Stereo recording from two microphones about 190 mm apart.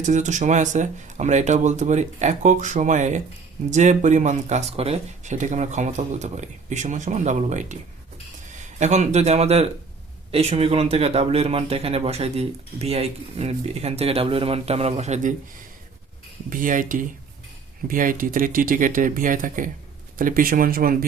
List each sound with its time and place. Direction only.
0.0 s speech: 40° right (ahead or behind)
16.5 s speech: 45° right (ahead or behind)